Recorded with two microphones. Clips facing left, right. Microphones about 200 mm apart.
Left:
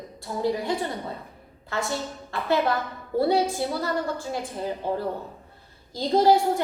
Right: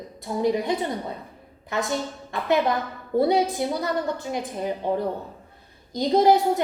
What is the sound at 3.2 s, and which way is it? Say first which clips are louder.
A woman's voice: right 1 dB; 20° right (ahead or behind).